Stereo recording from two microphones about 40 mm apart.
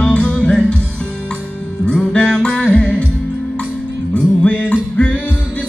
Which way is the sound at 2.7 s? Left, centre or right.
Left.